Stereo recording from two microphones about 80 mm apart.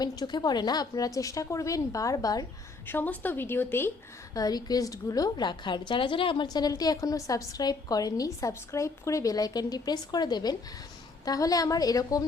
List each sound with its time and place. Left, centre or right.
0.0 s a woman's voice: left
2.8 s a woman's voice: left
4.4 s a woman's voice: left
5.4 s a woman's voice: left
5.9 s a woman's voice: left
11.3 s a woman's voice: left